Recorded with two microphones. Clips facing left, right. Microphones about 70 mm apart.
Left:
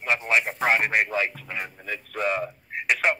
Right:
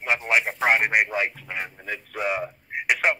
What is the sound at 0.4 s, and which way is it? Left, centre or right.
Radio, centre.